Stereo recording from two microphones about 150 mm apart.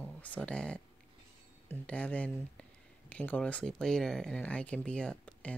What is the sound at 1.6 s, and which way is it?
Speech, 10° left (ahead or behind).